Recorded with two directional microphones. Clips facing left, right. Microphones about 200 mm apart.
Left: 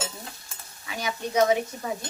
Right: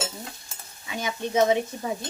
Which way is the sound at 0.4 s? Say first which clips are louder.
Even; 25° right (ahead or behind).